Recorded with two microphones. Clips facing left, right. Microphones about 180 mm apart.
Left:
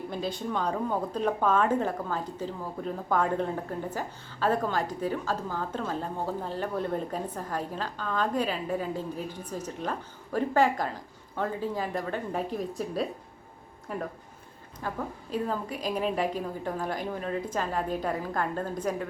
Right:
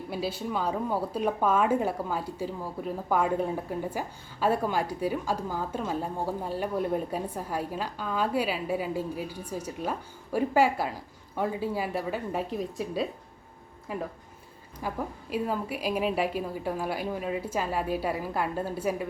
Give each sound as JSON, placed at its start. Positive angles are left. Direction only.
{"t": 0.1, "sound": "a woman's voice", "side_deg": -5}